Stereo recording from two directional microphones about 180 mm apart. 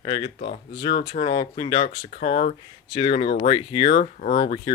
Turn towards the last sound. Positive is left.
turn(degrees=35)  # may be behind; listen again after turning